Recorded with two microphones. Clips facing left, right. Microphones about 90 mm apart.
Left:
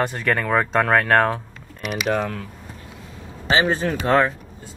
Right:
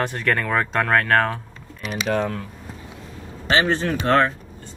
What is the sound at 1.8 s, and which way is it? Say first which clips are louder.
Speech: left 2 dB; 35° right (ahead or behind).